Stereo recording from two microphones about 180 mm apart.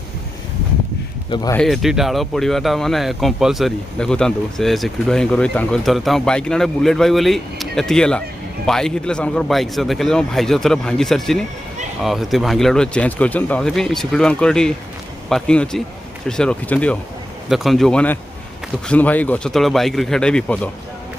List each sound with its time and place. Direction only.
1.3 s speech: 20° left (ahead or behind)
1.6 s speech: centre (ahead or behind)